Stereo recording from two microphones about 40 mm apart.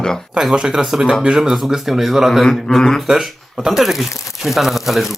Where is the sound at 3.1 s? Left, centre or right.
Centre.